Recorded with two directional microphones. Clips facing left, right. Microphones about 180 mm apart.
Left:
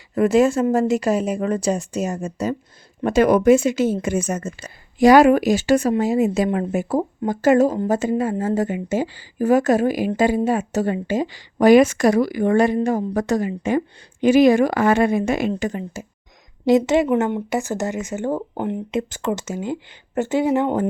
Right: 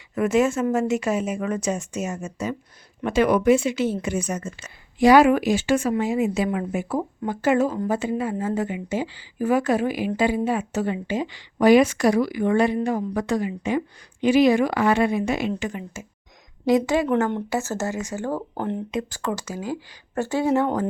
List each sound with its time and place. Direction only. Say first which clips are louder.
0.1 s speech: left 4 dB; 35° left (ahead or behind)
16.6 s speech: left 4 dB; 25° left (ahead or behind)